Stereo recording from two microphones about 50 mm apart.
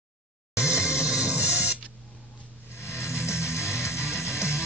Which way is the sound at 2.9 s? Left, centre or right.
Left.